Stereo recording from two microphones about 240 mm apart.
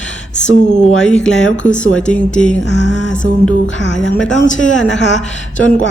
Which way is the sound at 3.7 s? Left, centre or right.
Left.